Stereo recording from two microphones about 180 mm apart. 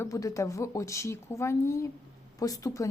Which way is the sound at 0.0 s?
20° left (ahead or behind).